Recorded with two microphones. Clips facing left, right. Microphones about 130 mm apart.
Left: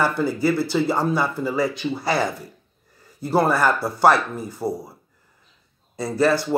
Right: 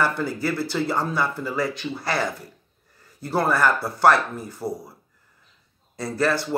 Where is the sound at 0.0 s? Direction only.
5° left (ahead or behind).